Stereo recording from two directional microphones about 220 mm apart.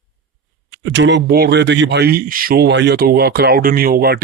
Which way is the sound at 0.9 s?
55° right (ahead or behind).